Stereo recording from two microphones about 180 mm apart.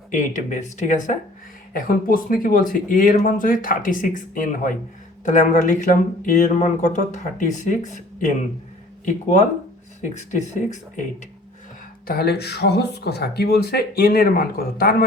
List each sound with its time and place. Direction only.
0.1 s speech: 45° left (ahead or behind)
12.0 s speech: 60° left (ahead or behind)